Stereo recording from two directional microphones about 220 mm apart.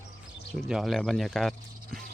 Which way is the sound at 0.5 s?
Centre (ahead or behind).